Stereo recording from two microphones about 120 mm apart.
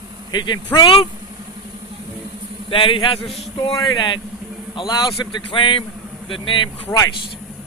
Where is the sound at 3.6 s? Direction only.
35° left (ahead or behind).